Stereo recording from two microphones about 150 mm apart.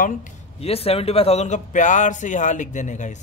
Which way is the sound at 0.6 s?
40° left (ahead or behind).